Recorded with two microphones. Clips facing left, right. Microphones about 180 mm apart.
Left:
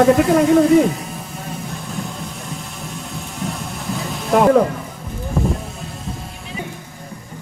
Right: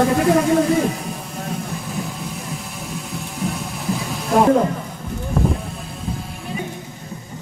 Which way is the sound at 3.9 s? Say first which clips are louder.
Right 1 dB; centre (ahead or behind).